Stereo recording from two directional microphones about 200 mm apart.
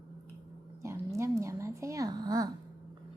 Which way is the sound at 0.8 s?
15° right (ahead or behind).